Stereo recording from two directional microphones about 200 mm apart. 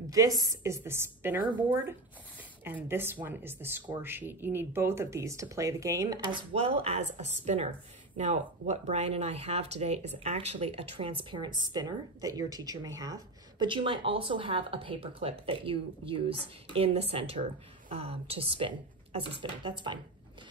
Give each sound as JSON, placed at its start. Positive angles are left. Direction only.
{"t": 0.1, "sound": "speech", "side_deg": -20}
{"t": 2.6, "sound": "speech", "side_deg": -10}
{"t": 6.5, "sound": "speech", "side_deg": -30}